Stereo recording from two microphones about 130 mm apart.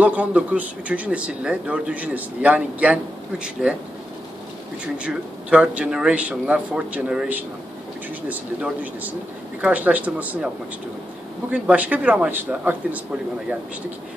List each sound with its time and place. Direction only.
0.0 s speech: 10° right (ahead or behind)
4.9 s speech: 10° right (ahead or behind)
11.5 s speech: 10° right (ahead or behind)